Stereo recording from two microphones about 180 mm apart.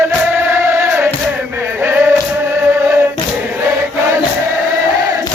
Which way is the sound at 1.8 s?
10° right (ahead or behind).